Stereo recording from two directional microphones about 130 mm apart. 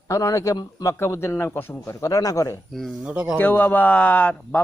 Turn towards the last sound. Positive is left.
turn(degrees=10)  # may be behind; listen again after turning